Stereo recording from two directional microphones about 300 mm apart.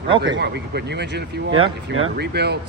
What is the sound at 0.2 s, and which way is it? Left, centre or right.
Speech, right.